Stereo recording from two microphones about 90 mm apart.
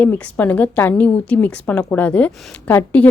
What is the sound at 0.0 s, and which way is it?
A woman's voice, 20° left (ahead or behind).